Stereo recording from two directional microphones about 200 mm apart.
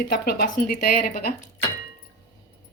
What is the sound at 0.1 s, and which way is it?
Speech, 50° left (ahead or behind).